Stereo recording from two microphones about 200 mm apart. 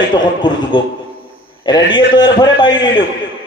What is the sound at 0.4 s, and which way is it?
A man's voice, 25° left (ahead or behind).